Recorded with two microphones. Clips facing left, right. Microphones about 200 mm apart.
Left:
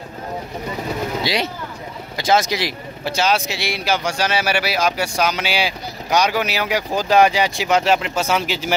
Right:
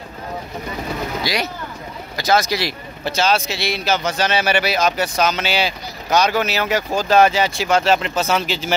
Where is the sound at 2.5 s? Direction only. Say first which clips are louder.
Even; 15° left (ahead or behind).